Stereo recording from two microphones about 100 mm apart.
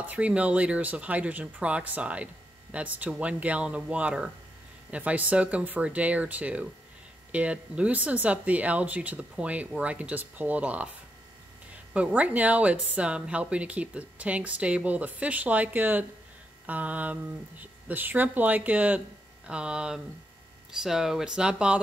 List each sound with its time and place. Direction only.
0.0 s speech: 15° right (ahead or behind)
11.9 s speech: 15° right (ahead or behind)